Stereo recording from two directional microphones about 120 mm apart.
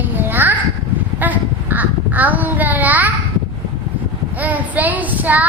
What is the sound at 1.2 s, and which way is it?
Child singing, 15° right (ahead or behind).